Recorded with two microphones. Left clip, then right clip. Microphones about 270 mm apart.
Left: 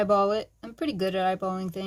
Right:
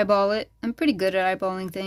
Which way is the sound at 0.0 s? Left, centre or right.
Right.